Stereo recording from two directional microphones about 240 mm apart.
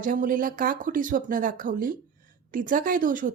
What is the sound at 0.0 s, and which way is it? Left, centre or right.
Speech, right.